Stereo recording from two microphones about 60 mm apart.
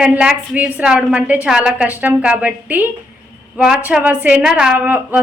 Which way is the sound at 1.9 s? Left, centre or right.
Right.